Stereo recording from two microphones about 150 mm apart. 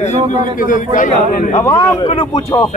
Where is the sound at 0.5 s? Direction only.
65° left (ahead or behind).